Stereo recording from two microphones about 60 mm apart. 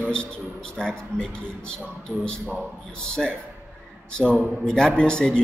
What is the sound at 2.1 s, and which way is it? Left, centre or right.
Speech, right.